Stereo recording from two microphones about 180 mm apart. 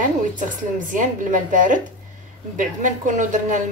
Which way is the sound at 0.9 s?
45° right (ahead or behind).